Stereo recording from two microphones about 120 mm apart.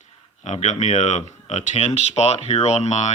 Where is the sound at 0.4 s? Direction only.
70° left (ahead or behind).